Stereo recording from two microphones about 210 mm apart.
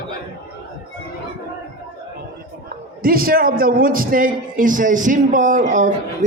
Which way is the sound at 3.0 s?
45° right (ahead or behind).